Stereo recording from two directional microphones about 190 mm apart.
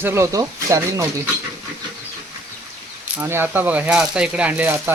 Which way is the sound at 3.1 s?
10° right (ahead or behind).